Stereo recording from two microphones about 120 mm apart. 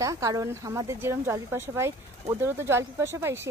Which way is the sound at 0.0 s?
25° right (ahead or behind).